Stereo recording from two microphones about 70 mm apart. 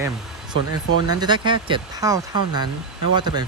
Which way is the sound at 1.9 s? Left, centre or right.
Right.